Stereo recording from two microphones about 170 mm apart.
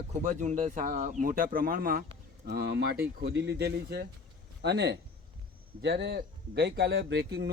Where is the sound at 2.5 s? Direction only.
70° right (ahead or behind).